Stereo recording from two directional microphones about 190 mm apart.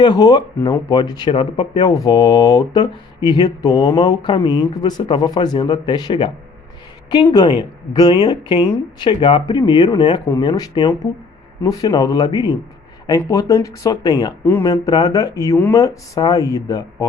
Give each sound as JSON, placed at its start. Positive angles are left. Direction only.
{"t": 0.0, "sound": "speech", "side_deg": 20}
{"t": 7.9, "sound": "speech", "side_deg": 20}